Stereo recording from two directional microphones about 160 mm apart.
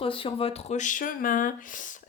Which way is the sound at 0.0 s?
35° left (ahead or behind).